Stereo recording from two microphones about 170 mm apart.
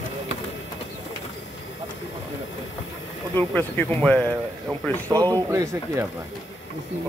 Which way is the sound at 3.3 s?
10° left (ahead or behind).